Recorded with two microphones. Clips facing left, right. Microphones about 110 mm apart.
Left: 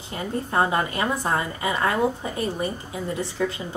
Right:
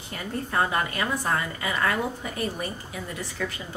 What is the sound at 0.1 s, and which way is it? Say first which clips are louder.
A woman's voice: left 3 dB; 25° left (ahead or behind).